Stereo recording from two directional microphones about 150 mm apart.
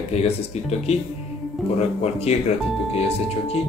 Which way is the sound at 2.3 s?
45° left (ahead or behind).